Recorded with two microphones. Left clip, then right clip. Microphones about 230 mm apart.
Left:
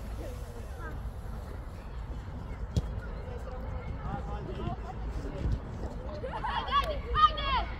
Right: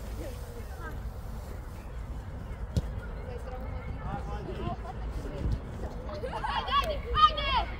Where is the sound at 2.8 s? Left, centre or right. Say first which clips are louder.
Right 1 dB; centre.